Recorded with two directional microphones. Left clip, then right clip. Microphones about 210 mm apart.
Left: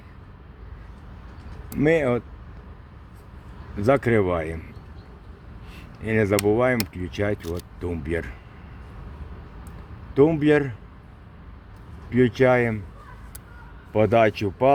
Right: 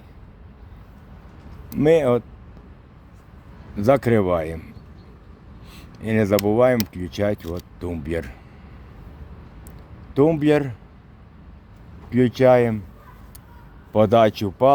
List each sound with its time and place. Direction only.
1.8 s speech: 15° right (ahead or behind)
3.8 s speech: 15° right (ahead or behind)
5.7 s a sound: 15° right (ahead or behind)
6.4 s speech: 15° right (ahead or behind)
10.2 s speech: 15° right (ahead or behind)
12.1 s speech: 15° right (ahead or behind)
13.9 s speech: 15° right (ahead or behind)